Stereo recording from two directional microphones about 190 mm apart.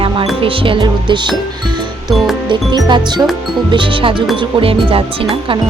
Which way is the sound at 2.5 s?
25° right (ahead or behind).